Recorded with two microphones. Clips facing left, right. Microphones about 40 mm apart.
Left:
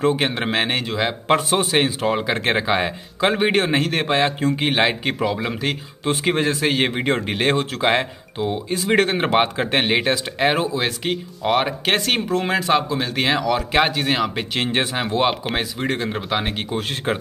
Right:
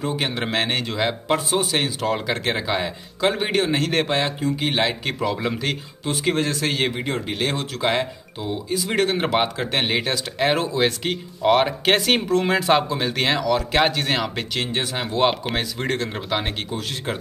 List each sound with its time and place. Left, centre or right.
0.1 s speech: centre
1.6 s speech: left
3.8 s speech: centre
6.2 s speech: left
7.0 s speech: left
7.5 s speech: left
10.5 s speech: centre
16.7 s speech: left